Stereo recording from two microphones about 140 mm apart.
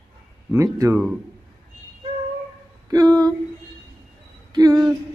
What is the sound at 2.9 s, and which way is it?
Speech, 25° right (ahead or behind).